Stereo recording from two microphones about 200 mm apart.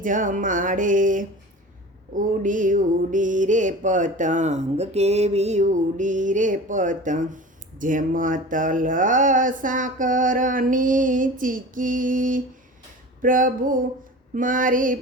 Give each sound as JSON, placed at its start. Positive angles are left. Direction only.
{"t": 0.0, "sound": "mantra", "side_deg": -40}
{"t": 13.2, "sound": "a sound", "side_deg": -40}
{"t": 14.3, "sound": "mantra", "side_deg": -40}